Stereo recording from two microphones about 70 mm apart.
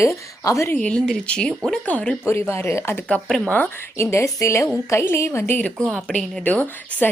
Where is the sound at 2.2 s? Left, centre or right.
Left.